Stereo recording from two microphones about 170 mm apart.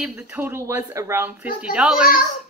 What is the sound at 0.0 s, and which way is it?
A woman's voice, 10° right (ahead or behind).